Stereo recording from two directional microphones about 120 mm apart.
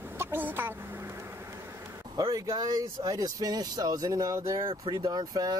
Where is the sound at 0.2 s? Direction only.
15° right (ahead or behind).